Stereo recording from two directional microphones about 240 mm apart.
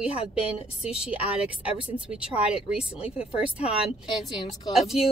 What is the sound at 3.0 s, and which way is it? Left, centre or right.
Speech, left.